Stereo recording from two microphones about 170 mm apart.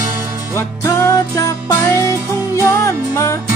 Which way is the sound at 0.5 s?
15° left (ahead or behind).